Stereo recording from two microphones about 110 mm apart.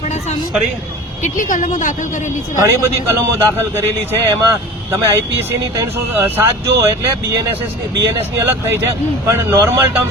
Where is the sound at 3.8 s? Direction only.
25° right (ahead or behind).